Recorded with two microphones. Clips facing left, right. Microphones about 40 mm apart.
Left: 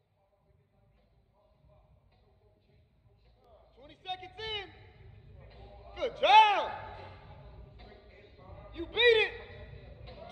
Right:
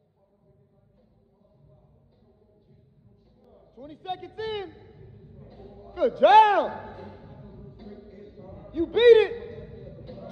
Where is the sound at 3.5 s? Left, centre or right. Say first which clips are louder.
Right 11 dB; left.